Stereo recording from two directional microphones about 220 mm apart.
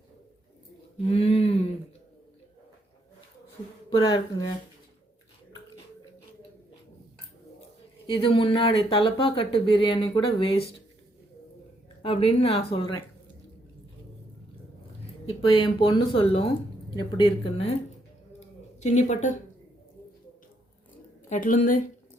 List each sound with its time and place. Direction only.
0.9 s a sound: 25° left (ahead or behind)
3.9 s speech: 20° left (ahead or behind)
8.0 s speech: 25° left (ahead or behind)
12.0 s speech: 25° left (ahead or behind)
15.3 s speech: 20° left (ahead or behind)
18.3 s a sound: 30° left (ahead or behind)
21.2 s speech: 35° left (ahead or behind)